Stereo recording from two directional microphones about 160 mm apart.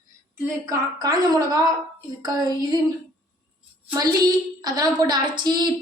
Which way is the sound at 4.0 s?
25° right (ahead or behind).